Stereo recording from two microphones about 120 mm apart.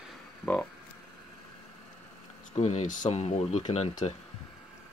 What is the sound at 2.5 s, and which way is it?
Speech, 70° left (ahead or behind).